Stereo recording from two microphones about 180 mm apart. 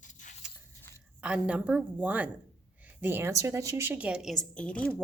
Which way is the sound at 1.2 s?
5° right (ahead or behind).